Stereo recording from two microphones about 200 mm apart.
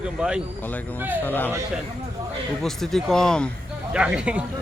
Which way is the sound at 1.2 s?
10° left (ahead or behind).